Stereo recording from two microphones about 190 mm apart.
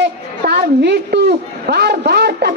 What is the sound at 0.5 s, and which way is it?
A woman's voice, 60° right (ahead or behind).